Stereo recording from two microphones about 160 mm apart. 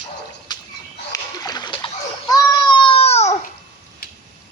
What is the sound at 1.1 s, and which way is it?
Splash, 25° left (ahead or behind).